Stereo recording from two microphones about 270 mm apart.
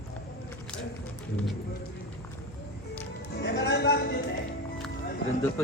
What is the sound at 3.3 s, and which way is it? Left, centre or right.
Music, left.